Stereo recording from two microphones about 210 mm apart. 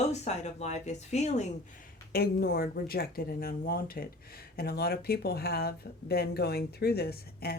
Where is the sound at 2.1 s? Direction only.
50° left (ahead or behind).